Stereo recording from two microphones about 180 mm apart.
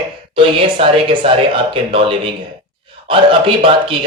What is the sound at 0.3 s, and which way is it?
A man's voice, 30° right (ahead or behind).